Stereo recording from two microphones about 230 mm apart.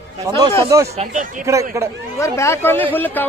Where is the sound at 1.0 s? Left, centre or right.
Right.